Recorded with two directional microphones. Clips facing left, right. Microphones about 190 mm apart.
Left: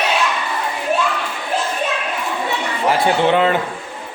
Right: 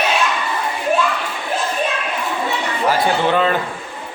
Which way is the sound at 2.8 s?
25° left (ahead or behind).